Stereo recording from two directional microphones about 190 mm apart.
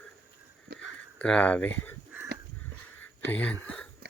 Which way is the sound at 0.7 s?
60° right (ahead or behind).